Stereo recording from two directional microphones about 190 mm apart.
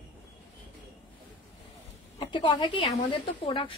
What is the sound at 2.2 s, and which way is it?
A woman's voice, 25° left (ahead or behind).